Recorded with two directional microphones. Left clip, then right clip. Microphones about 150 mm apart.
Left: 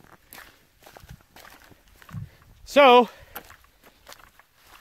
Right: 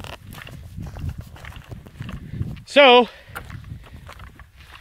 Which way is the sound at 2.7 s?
30° left (ahead or behind).